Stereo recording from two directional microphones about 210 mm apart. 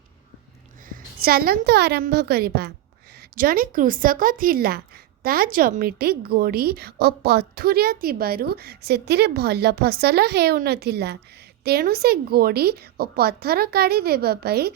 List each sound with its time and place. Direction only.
0.9 s a woman's voice: 45° right (ahead or behind)